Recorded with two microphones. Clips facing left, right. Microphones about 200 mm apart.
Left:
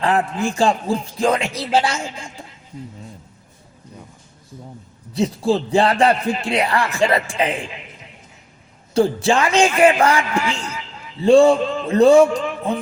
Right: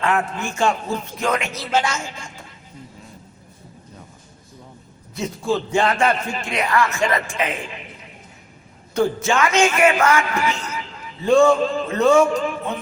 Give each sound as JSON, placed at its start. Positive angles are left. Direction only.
{"t": 0.0, "sound": "speech", "side_deg": 35}
{"t": 5.1, "sound": "speech", "side_deg": 30}
{"t": 8.9, "sound": "speech", "side_deg": 30}